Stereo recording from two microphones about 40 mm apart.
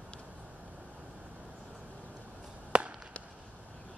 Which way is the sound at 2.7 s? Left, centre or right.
Right.